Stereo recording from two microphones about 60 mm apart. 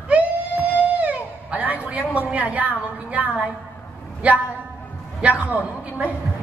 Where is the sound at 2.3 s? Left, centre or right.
Right.